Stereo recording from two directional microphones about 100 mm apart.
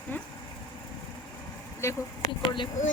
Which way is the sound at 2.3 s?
55° left (ahead or behind).